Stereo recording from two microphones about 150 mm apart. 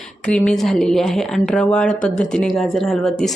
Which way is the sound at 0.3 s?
5° left (ahead or behind).